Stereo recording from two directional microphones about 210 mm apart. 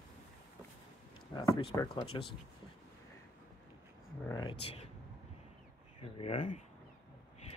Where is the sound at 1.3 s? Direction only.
20° left (ahead or behind).